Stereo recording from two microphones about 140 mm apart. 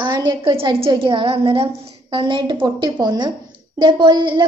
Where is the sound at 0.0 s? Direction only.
30° right (ahead or behind).